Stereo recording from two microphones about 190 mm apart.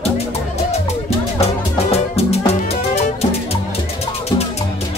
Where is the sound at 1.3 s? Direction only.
35° left (ahead or behind).